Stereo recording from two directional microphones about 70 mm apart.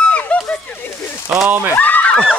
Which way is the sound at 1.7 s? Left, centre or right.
Left.